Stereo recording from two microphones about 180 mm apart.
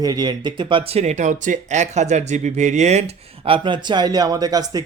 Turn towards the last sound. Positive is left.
turn(degrees=-20)  # may be behind; listen again after turning